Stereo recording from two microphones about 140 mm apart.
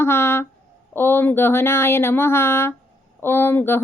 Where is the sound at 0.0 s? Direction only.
15° left (ahead or behind).